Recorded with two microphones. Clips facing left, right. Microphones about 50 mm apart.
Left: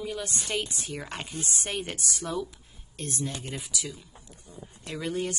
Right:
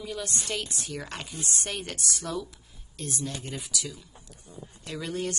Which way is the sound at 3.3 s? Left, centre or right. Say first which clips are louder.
Even; centre.